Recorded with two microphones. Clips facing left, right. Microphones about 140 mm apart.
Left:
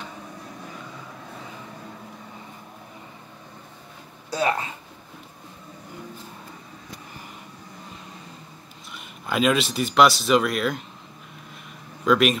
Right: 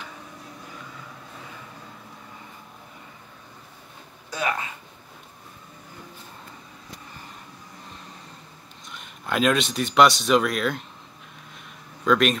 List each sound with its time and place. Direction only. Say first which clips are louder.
4.3 s speech: left 4 dB; 35° left (ahead or behind)
8.9 s speech: left 1 dB; centre (ahead or behind)
12.0 s speech: left 1 dB; 5° left (ahead or behind)